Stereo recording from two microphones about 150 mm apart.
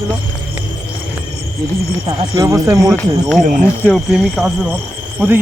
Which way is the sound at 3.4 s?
60° right (ahead or behind).